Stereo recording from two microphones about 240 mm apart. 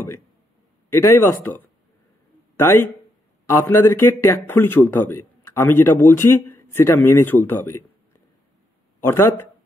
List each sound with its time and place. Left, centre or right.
1.0 s a man's voice: centre
9.0 s a man's voice: centre